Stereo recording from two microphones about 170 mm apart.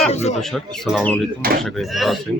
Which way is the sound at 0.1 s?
40° left (ahead or behind).